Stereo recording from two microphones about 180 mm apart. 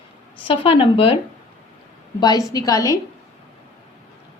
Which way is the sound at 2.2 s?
20° left (ahead or behind).